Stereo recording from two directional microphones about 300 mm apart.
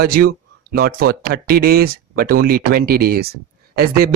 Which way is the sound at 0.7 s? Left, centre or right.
Right.